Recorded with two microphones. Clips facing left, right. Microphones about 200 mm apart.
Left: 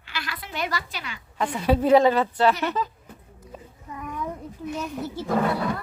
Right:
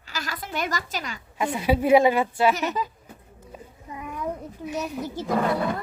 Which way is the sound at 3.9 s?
10° right (ahead or behind).